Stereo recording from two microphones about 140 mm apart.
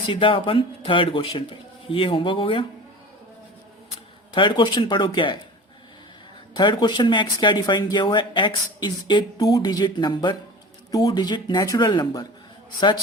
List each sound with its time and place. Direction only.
0.1 s speech: 40° left (ahead or behind)
4.4 s speech: 35° left (ahead or behind)
6.5 s speech: 30° left (ahead or behind)